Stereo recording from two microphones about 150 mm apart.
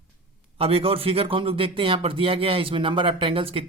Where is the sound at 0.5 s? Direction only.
40° right (ahead or behind).